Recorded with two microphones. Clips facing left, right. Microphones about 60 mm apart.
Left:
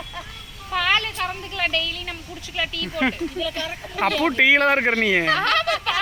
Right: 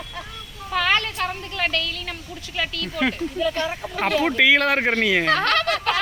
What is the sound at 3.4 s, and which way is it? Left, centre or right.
Speech, right.